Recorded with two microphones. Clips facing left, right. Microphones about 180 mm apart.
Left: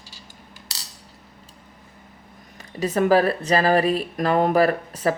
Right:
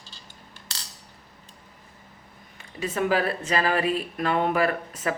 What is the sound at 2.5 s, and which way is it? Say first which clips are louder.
Speech: left 6 dB; 40° left (ahead or behind).